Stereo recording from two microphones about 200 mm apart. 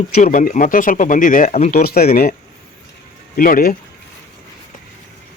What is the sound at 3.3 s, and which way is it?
Speech, 45° left (ahead or behind).